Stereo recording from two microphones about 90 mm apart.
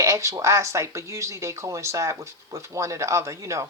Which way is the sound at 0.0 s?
35° right (ahead or behind).